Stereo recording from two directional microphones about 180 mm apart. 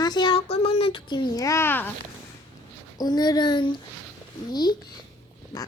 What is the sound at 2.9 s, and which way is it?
Speech, 20° left (ahead or behind).